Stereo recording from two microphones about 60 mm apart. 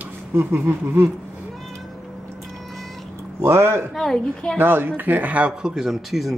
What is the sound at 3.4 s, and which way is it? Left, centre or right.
Speech, right.